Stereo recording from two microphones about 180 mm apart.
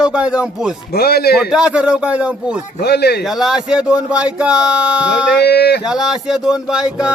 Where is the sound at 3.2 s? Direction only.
Centre (ahead or behind).